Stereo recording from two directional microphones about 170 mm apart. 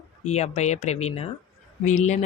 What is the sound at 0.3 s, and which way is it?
Speech, 40° left (ahead or behind).